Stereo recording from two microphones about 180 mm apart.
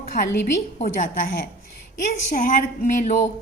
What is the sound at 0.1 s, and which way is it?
Speech, 45° left (ahead or behind).